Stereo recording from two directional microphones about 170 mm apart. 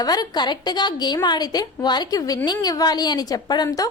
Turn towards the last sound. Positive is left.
turn(degrees=20)  # may be behind; listen again after turning